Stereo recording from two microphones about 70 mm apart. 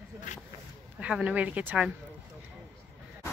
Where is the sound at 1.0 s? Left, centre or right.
Centre.